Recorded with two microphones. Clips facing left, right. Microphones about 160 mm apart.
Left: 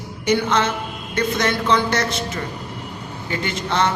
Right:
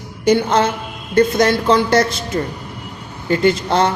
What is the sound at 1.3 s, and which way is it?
A woman's voice, 35° right (ahead or behind).